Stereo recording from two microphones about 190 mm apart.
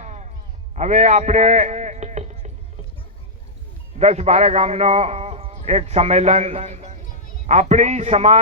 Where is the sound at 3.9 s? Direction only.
35° right (ahead or behind).